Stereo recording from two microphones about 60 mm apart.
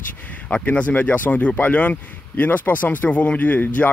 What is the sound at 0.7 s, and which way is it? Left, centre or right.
Speech, left.